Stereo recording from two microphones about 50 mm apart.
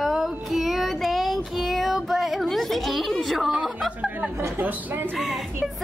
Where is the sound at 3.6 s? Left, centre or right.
Centre.